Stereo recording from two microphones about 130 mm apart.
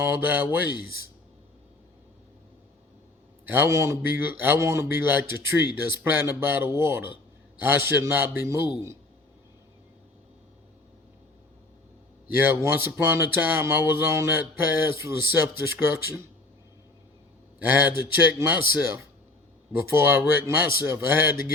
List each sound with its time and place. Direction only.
0.2 s speech: 15° right (ahead or behind)
3.4 s speech: 15° right (ahead or behind)
12.3 s speech: 15° right (ahead or behind)
17.6 s speech: 15° right (ahead or behind)